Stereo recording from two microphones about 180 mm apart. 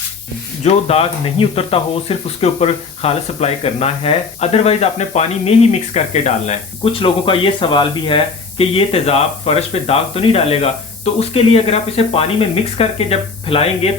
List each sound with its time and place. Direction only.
0.6 s speech: 35° left (ahead or behind)
7.0 s speech: 30° left (ahead or behind)